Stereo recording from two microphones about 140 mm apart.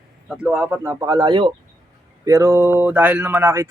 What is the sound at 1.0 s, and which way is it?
Speech, 30° right (ahead or behind).